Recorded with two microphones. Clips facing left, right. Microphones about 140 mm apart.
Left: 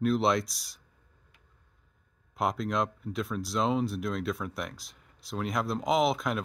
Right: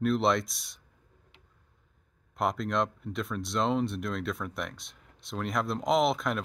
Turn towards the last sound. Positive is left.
turn(degrees=0)  # may be behind; listen again after turning